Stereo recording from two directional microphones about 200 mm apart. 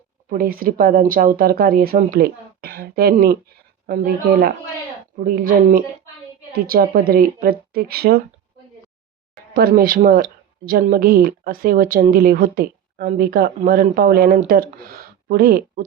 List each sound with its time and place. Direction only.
0.3 s speech: 45° right (ahead or behind)
9.6 s speech: 45° right (ahead or behind)